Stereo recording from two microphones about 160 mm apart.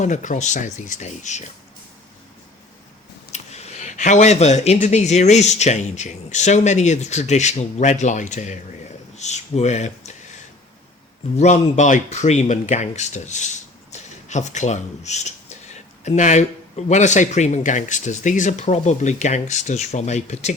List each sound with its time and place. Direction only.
0.0 s speech: 50° left (ahead or behind)
3.3 s speech: 40° left (ahead or behind)
11.3 s speech: 45° left (ahead or behind)